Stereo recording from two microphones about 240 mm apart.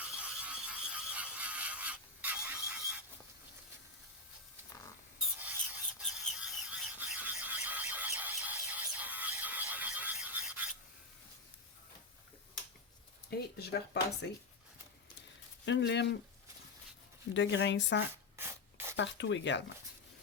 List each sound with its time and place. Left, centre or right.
0.0 s a sound: centre
5.2 s a sound: centre
13.3 s speech: left
15.6 s speech: left
17.3 s speech: left
18.3 s spray: centre
18.9 s speech: left